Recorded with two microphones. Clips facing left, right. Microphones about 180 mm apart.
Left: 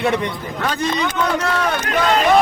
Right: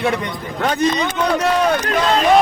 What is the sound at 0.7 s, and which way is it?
Speech, 20° right (ahead or behind).